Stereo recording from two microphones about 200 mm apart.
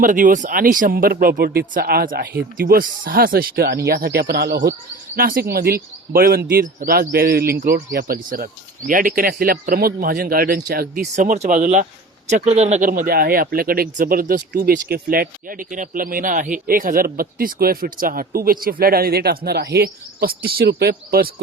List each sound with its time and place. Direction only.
0.0 s speech: 40° right (ahead or behind)